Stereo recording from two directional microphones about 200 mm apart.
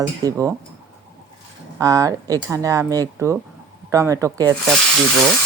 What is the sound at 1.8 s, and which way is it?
Speech, 15° right (ahead or behind).